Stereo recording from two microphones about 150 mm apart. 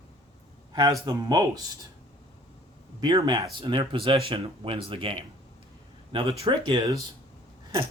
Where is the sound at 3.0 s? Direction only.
30° right (ahead or behind).